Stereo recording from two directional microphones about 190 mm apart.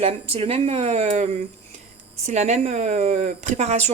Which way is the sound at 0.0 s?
30° right (ahead or behind).